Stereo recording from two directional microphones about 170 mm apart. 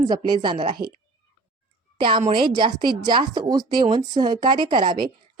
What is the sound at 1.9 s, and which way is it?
A woman's voice, 30° right (ahead or behind).